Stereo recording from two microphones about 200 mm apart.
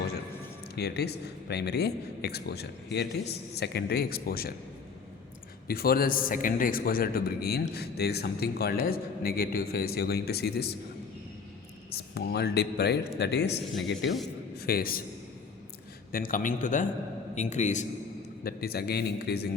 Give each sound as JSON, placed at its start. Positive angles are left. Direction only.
{"t": 0.8, "sound": "a man's voice", "side_deg": 55}
{"t": 5.6, "sound": "a man's voice", "side_deg": 50}
{"t": 11.9, "sound": "a man's voice", "side_deg": 55}
{"t": 16.1, "sound": "a man's voice", "side_deg": 45}
{"t": 18.4, "sound": "a man's voice", "side_deg": 50}